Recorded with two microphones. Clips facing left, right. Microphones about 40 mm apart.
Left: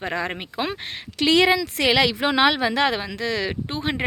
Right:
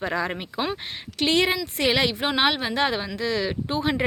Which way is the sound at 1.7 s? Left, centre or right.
Left.